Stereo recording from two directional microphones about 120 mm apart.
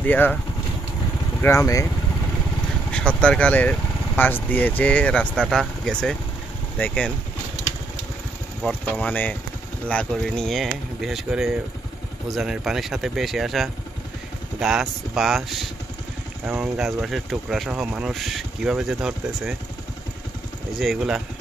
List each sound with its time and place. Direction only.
0.0 s speech: 15° left (ahead or behind)
1.4 s speech: 25° left (ahead or behind)
2.9 s speech: 10° left (ahead or behind)
8.9 s speech: 10° left (ahead or behind); by 19.5 s 5° right (ahead or behind)
20.7 s speech: centre (ahead or behind)